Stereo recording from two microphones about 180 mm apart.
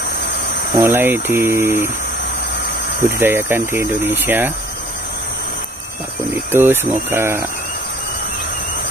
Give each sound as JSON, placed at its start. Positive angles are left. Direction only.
{"t": 0.7, "sound": "speech", "side_deg": -15}
{"t": 3.0, "sound": "speech", "side_deg": -10}
{"t": 6.5, "sound": "speech", "side_deg": -15}